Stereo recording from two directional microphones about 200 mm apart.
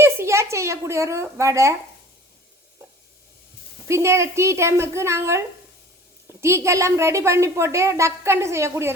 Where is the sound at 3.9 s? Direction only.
15° right (ahead or behind).